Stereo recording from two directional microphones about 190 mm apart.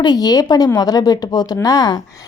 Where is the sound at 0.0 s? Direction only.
20° left (ahead or behind).